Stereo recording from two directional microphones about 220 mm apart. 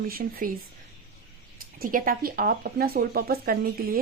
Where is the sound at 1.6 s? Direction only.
40° right (ahead or behind).